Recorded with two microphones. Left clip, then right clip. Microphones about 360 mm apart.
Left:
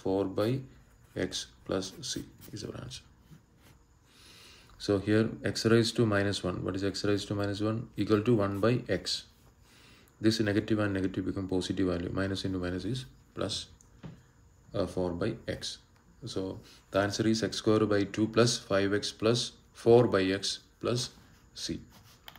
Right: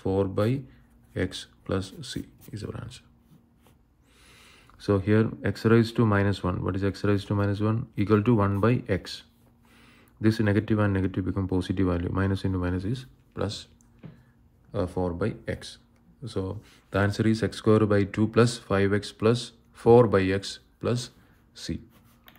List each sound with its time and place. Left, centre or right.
0.0 s speech: centre
4.2 s speech: centre
14.7 s speech: centre